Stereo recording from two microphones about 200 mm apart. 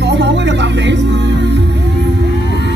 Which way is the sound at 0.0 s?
60° right (ahead or behind).